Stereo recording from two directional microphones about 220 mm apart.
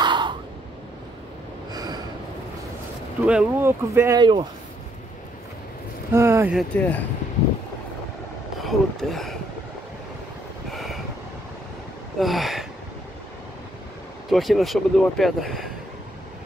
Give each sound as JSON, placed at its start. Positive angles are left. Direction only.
{"t": 0.0, "sound": "cough", "side_deg": -20}
{"t": 1.7, "sound": "snort", "side_deg": -15}
{"t": 3.3, "sound": "speech", "side_deg": -5}
{"t": 6.1, "sound": "speech", "side_deg": -10}
{"t": 6.7, "sound": "speech", "side_deg": 5}
{"t": 8.6, "sound": "speech", "side_deg": 0}
{"t": 10.7, "sound": "vehicle", "side_deg": 0}
{"t": 12.2, "sound": "a sound", "side_deg": 0}
{"t": 14.3, "sound": "speech", "side_deg": 0}